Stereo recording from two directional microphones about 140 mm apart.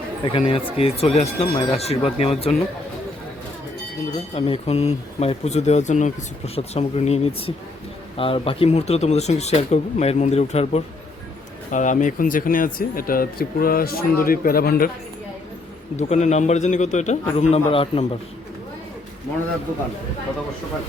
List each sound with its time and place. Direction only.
0.3 s speech: 40° left (ahead or behind)
4.4 s speech: 45° left (ahead or behind)
11.7 s speech: 65° left (ahead or behind); by 14.8 s 90° left
16.0 s a man's voice: 55° left (ahead or behind)